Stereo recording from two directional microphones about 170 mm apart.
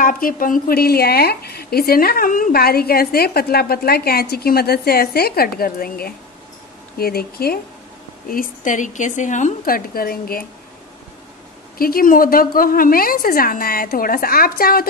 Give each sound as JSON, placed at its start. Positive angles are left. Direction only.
{"t": 0.0, "sound": "a woman's voice", "side_deg": 55}
{"t": 8.3, "sound": "a woman's voice", "side_deg": 50}
{"t": 11.8, "sound": "a woman's voice", "side_deg": 60}